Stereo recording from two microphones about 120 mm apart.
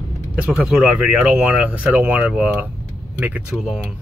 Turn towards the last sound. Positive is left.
turn(degrees=0)  # may be behind; listen again after turning